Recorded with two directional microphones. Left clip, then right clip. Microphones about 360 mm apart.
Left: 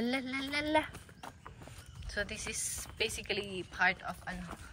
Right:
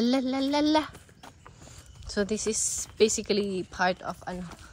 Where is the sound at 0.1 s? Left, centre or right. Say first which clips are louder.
Right 9 dB; centre.